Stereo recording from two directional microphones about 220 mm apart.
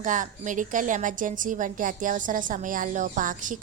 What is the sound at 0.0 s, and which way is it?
A woman's voice, 35° right (ahead or behind).